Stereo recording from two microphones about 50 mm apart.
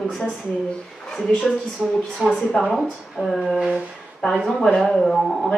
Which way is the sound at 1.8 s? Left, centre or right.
Centre.